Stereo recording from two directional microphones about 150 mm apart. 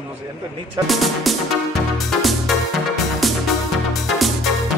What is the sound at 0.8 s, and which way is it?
Speech, centre (ahead or behind).